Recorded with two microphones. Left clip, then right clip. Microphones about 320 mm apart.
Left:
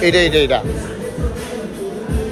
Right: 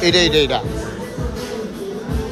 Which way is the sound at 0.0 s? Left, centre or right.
Centre.